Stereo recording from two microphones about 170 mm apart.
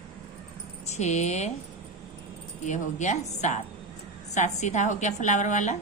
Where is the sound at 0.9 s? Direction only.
40° left (ahead or behind).